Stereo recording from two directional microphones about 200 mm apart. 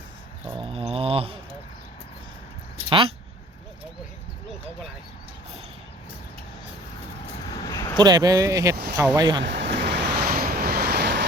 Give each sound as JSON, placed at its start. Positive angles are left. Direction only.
{"t": 0.6, "sound": "a sound", "side_deg": -25}
{"t": 7.6, "sound": "a sound", "side_deg": 15}
{"t": 7.9, "sound": "speech", "side_deg": -20}
{"t": 8.7, "sound": "speech", "side_deg": -50}
{"t": 9.1, "sound": "speech", "side_deg": -20}
{"t": 9.4, "sound": "vehicle", "side_deg": -60}